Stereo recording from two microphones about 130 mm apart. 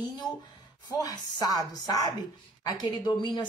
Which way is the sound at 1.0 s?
30° left (ahead or behind).